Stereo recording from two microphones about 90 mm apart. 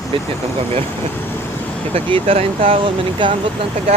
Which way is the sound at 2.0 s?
85° right.